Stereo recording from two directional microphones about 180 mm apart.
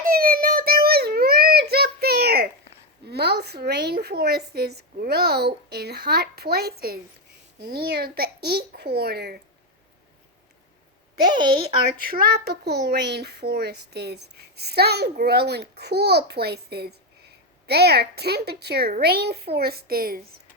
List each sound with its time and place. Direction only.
0.0 s a sound: 50° right (ahead or behind)
3.1 s a child's voice: 65° right (ahead or behind)
11.3 s a woman's voice: 25° right (ahead or behind)
12.1 s a child's voice: 60° right (ahead or behind)